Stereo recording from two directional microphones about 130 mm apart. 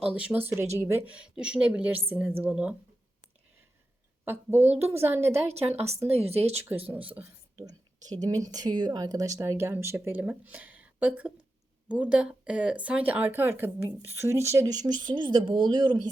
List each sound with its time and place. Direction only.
0.0 s speech: 10° right (ahead or behind)
4.3 s speech: 15° right (ahead or behind)
5.3 s a woman's voice: 55° right (ahead or behind)
6.6 s speech: 15° right (ahead or behind)
7.6 s a sound: 30° right (ahead or behind)
8.2 s speech: 30° right (ahead or behind)